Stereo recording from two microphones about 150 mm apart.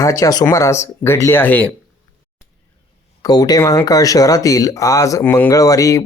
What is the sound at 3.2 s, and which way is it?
Speech, 25° left (ahead or behind).